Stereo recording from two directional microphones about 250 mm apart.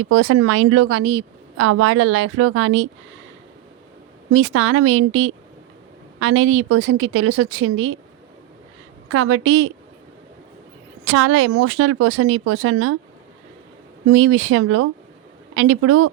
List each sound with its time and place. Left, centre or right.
0.0 s speech: right
4.3 s a woman's voice: right
9.0 s a woman's voice: right
11.0 s speech: right
14.1 s speech: right